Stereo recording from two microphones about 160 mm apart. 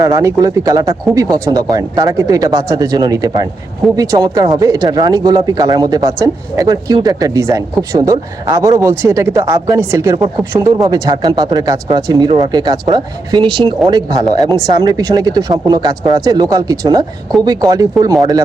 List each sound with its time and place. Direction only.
0.0 s speech: 20° right (ahead or behind)